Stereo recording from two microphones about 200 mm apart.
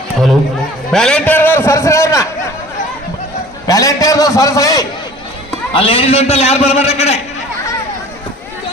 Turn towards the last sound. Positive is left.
turn(degrees=30)  # may be behind; listen again after turning